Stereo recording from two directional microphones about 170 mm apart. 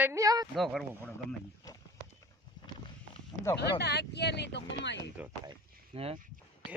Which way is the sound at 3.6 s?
80° left.